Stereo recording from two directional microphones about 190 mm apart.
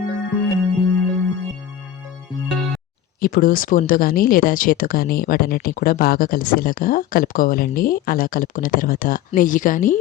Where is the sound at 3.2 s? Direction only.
50° left (ahead or behind).